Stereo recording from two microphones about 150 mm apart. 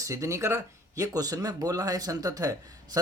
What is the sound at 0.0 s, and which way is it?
Speech, 20° right (ahead or behind).